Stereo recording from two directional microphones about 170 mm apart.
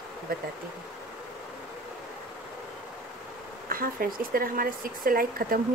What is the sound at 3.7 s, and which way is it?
A woman's voice, 60° right (ahead or behind).